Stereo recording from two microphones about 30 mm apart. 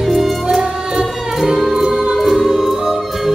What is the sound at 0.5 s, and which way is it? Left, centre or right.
Music, centre.